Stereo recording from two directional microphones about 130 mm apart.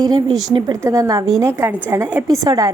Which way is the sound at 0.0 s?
30° right (ahead or behind).